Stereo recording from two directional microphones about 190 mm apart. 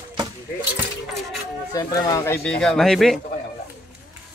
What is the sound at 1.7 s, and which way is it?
Speech, 20° left (ahead or behind).